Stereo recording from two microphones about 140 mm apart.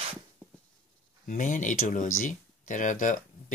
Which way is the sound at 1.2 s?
60° left (ahead or behind).